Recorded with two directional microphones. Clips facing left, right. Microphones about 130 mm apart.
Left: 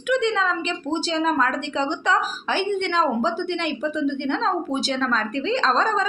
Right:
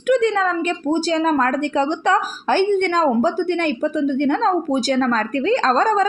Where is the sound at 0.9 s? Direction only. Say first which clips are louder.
Right 3 dB; 45° right (ahead or behind).